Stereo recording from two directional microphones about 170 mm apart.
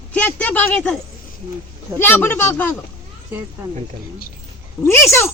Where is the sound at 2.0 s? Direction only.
10° left (ahead or behind).